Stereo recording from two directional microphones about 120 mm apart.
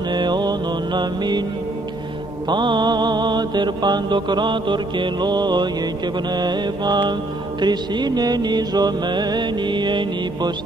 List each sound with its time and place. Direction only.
0.1 s mantra: 40° right (ahead or behind)
2.4 s mantra: 40° right (ahead or behind)